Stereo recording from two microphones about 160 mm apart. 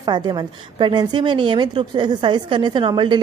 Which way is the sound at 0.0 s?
25° right (ahead or behind).